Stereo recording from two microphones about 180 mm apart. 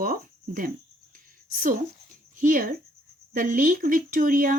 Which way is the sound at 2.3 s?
50° right (ahead or behind).